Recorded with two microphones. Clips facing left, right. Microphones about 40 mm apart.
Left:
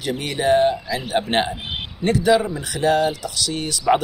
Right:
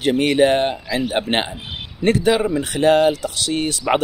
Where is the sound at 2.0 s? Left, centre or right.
Right.